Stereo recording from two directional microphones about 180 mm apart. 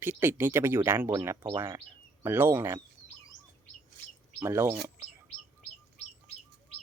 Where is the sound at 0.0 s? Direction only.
10° right (ahead or behind).